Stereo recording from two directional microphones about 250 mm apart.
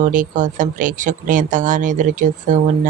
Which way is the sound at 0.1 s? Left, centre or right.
Right.